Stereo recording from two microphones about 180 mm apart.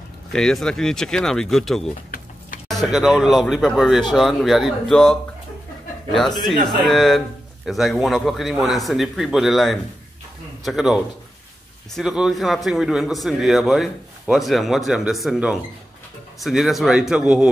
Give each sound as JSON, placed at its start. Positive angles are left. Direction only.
{"t": 0.3, "sound": "a man's voice", "side_deg": 5}
{"t": 2.0, "sound": "a sound", "side_deg": 50}
{"t": 2.7, "sound": "a man's voice", "side_deg": 0}
{"t": 6.9, "sound": "a man's voice", "side_deg": 0}